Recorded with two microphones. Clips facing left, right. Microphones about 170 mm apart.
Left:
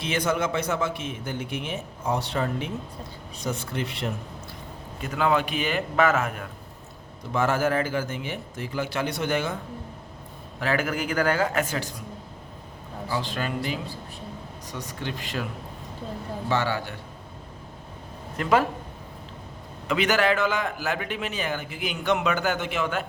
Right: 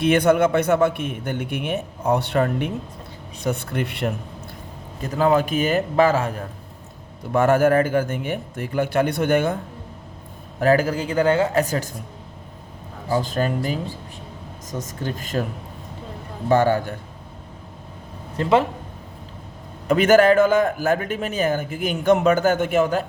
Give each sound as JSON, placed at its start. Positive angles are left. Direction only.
{"t": 0.0, "sound": "a man's voice", "side_deg": -60}
{"t": 4.9, "sound": "a man's voice", "side_deg": -35}
{"t": 7.3, "sound": "a man's voice", "side_deg": -55}
{"t": 10.6, "sound": "speech", "side_deg": -40}
{"t": 11.6, "sound": "a man's voice", "side_deg": -40}
{"t": 13.1, "sound": "a man's voice", "side_deg": -45}
{"t": 16.5, "sound": "a man's voice", "side_deg": -50}
{"t": 18.3, "sound": "speech", "side_deg": -25}
{"t": 19.9, "sound": "a man's voice", "side_deg": -45}